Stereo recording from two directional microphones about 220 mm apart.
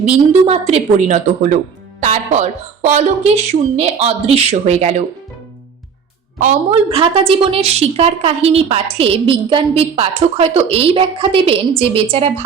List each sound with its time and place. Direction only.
0.0 s a woman's voice: 30° right (ahead or behind)
6.4 s a woman's voice: 25° right (ahead or behind)